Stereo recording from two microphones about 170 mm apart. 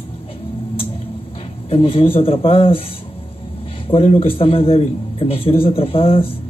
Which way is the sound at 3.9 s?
35° left (ahead or behind).